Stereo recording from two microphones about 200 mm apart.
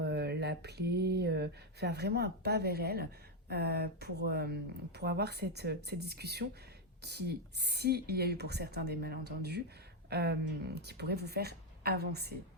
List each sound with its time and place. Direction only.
0.0 s speech: 55° right (ahead or behind)